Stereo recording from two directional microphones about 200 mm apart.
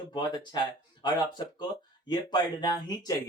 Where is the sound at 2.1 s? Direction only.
20° left (ahead or behind).